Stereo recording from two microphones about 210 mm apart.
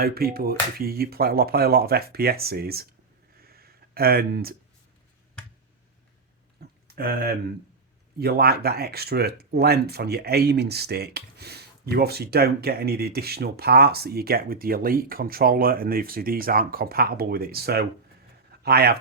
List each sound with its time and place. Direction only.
0.0 s speech: 45° right (ahead or behind)
3.4 s a sound: 45° right (ahead or behind)
6.8 s speech: 45° right (ahead or behind)